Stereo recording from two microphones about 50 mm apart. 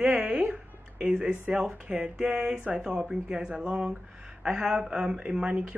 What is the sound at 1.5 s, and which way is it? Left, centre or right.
Speech, centre.